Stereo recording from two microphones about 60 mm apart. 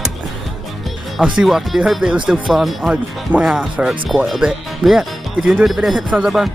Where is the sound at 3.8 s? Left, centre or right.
Centre.